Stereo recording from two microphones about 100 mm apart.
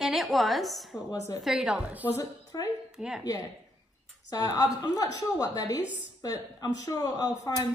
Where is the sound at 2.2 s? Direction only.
35° left (ahead or behind).